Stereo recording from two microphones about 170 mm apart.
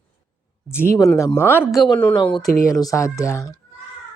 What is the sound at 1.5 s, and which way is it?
Speech, 10° right (ahead or behind).